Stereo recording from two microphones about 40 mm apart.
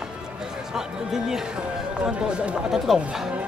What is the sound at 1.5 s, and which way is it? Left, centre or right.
Speech, right.